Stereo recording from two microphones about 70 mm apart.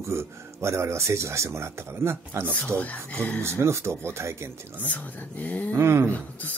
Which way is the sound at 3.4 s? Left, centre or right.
Right.